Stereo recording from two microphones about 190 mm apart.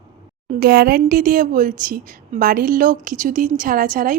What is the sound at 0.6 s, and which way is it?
A woman's voice, 55° right (ahead or behind).